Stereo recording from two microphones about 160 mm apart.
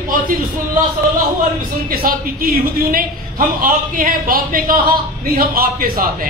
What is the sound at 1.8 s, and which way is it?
A man's voice, 65° right (ahead or behind).